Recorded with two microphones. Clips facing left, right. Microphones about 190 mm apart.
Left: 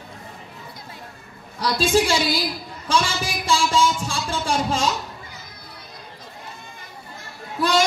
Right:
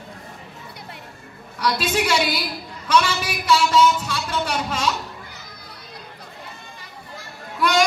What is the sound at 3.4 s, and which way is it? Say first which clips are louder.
Music: right 3 dB; 30° left (ahead or behind).